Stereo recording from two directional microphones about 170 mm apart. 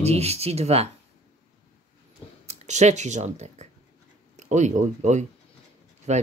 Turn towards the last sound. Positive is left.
turn(degrees=-40)  # may be behind; listen again after turning